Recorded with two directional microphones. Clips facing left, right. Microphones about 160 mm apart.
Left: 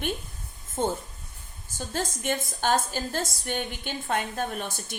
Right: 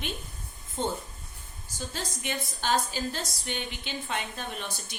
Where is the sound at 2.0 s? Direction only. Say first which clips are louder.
Left 7 dB; 50° left (ahead or behind).